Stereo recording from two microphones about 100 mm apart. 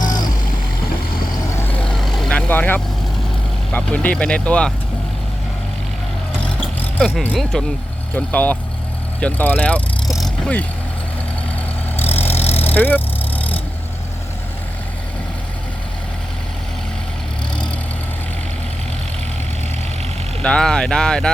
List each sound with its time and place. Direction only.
0.0 s vehicle: 40° left (ahead or behind)
1.8 s vehicle: centre (ahead or behind)
2.5 s speech: 20° left (ahead or behind)
7.5 s speech: 5° left (ahead or behind)
10.1 s vehicle: centre (ahead or behind)
10.4 s speech: 15° left (ahead or behind)
12.3 s vehicle: 85° left
12.6 s vehicle: 20° left (ahead or behind)
20.4 s speech: 10° left (ahead or behind)